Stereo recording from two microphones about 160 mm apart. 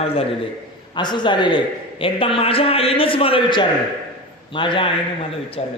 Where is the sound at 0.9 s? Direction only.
30° left (ahead or behind).